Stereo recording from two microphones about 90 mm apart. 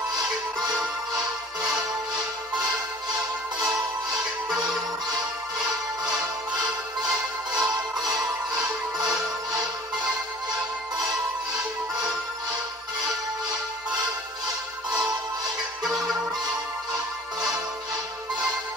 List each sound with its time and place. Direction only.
0.1 s music: 45° right (ahead or behind)
4.6 s music: 50° right (ahead or behind)
6.5 s music: 45° right (ahead or behind)
15.8 s music: centre (ahead or behind)